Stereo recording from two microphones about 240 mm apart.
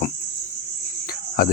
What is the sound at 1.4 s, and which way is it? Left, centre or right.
Speech, left.